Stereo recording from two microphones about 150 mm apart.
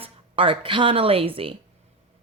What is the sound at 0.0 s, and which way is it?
Speech, 35° right (ahead or behind).